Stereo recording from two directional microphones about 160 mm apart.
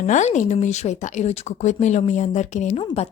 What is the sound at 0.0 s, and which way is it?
A woman's voice, 50° left (ahead or behind).